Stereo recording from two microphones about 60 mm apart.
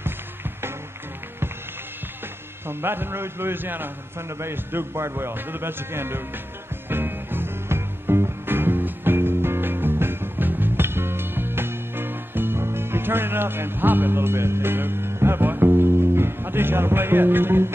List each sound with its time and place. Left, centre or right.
2.7 s a man's voice: right
4.4 s a man's voice: right
6.9 s music: right